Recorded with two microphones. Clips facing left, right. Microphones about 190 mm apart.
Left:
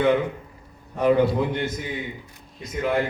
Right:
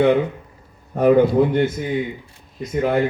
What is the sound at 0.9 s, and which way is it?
Speech, 50° right (ahead or behind).